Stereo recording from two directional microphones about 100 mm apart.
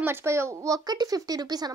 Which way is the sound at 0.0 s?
25° right (ahead or behind).